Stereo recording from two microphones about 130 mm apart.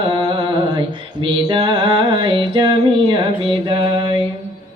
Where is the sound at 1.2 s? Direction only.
40° right (ahead or behind).